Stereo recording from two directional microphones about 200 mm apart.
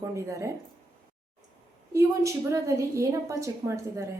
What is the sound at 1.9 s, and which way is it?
A woman's voice, 15° right (ahead or behind).